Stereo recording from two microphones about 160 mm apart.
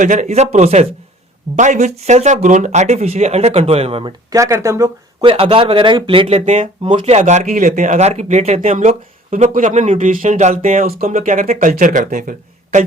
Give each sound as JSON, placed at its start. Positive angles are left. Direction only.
{"t": 0.0, "sound": "speech", "side_deg": -50}
{"t": 4.3, "sound": "speech", "side_deg": -20}
{"t": 5.2, "sound": "speech", "side_deg": -35}
{"t": 8.7, "sound": "speech", "side_deg": -50}